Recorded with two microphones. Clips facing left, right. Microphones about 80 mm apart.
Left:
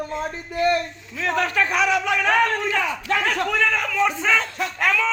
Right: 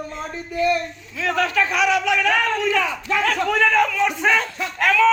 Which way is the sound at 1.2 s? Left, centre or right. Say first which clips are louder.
Right 1 dB; left.